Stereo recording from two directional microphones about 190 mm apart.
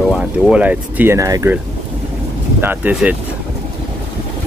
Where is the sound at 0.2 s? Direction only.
5° right (ahead or behind).